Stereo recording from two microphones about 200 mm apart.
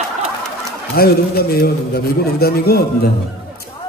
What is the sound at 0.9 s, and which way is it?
A man's voice, 50° left (ahead or behind).